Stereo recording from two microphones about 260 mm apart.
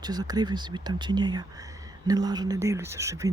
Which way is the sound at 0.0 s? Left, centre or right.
Centre.